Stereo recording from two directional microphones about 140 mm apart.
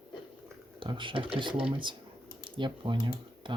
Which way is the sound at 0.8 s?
35° right (ahead or behind).